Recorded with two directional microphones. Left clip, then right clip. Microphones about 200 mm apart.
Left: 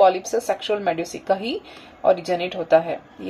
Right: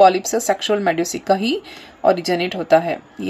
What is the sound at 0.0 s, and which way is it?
Speech, 55° right (ahead or behind).